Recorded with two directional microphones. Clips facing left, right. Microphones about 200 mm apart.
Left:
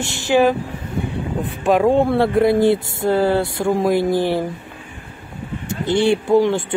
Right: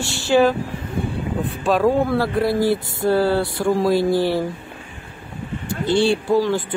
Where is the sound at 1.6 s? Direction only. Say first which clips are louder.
Left 3 dB; 20° left (ahead or behind).